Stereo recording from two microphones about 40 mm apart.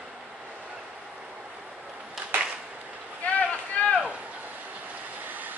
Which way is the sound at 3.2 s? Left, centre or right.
Left.